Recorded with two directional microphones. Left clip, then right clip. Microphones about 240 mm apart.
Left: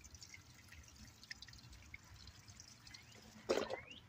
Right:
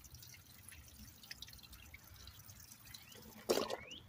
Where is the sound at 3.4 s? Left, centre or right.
Right.